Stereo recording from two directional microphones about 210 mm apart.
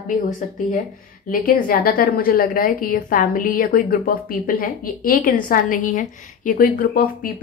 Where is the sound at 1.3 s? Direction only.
45° left (ahead or behind).